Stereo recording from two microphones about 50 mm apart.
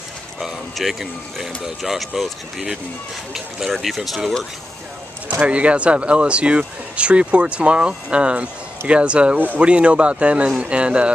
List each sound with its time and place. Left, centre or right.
0.4 s speech: centre
3.3 s speech: centre
5.3 s speech: right